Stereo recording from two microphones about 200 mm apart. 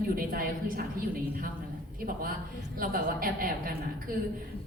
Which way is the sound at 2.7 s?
45° right (ahead or behind).